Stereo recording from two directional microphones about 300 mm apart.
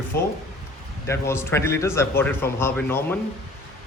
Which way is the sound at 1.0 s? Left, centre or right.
Centre.